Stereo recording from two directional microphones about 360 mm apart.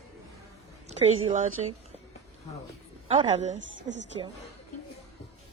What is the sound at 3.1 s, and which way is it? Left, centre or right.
Speech, centre.